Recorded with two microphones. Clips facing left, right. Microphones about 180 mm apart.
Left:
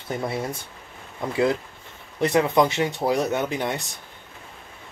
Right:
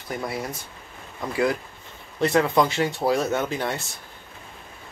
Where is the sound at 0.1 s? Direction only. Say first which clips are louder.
Left 2 dB; 25° left (ahead or behind).